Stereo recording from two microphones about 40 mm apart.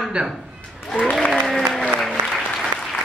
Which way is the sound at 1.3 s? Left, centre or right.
Centre.